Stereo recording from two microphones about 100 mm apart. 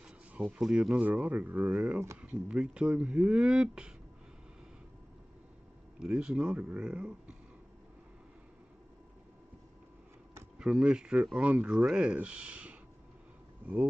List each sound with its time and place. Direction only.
0.0 s speech: 10° right (ahead or behind)
5.9 s speech: 10° right (ahead or behind)
10.6 s speech: 10° right (ahead or behind)